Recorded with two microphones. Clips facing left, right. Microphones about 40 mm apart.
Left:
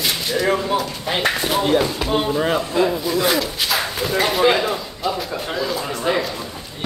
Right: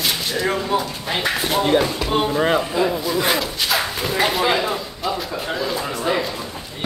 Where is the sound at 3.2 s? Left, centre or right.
Centre.